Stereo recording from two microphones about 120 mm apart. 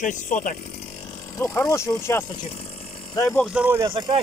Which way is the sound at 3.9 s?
45° right (ahead or behind).